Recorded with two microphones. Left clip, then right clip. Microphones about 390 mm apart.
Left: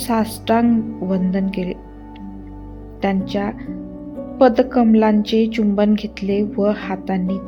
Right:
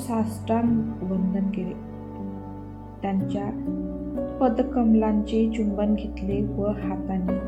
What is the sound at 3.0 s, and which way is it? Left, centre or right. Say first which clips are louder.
A woman's voice: left 8 dB; centre.